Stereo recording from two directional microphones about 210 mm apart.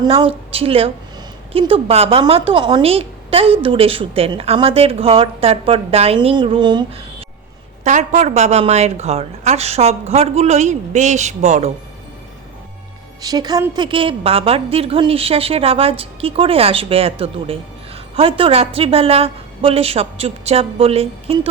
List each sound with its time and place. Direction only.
0.0 s a woman's voice: 25° right (ahead or behind)
13.2 s a woman's voice: 20° right (ahead or behind)